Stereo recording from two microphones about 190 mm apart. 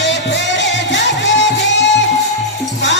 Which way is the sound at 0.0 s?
70° left (ahead or behind).